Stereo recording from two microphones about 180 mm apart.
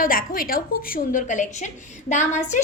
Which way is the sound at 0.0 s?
50° left (ahead or behind).